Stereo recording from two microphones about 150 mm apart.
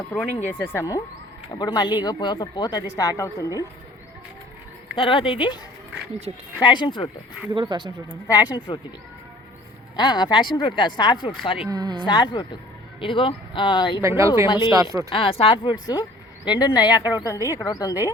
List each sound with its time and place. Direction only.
0.1 s speech: 10° left (ahead or behind)
4.9 s speech: 35° left (ahead or behind)
6.3 s speech: 35° right (ahead or behind)
6.6 s speech: 30° left (ahead or behind)
7.5 s speech: 30° right (ahead or behind)
8.3 s speech: 25° left (ahead or behind)
9.9 s speech: 30° left (ahead or behind)
11.7 s speech: 25° right (ahead or behind)
12.0 s speech: 30° left (ahead or behind)
14.0 s speech: 20° right (ahead or behind)
14.4 s speech: 30° left (ahead or behind)